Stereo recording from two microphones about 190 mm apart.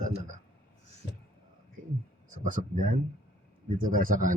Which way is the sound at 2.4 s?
45° right (ahead or behind).